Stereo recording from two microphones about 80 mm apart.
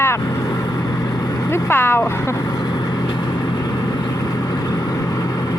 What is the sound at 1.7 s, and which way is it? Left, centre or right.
Speech, left.